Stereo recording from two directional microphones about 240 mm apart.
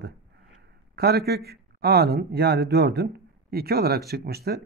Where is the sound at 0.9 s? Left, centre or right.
Right.